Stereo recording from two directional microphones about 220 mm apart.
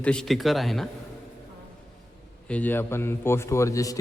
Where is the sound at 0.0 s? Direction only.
5° left (ahead or behind).